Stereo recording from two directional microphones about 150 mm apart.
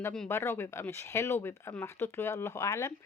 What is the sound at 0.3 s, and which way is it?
Speech, 15° left (ahead or behind).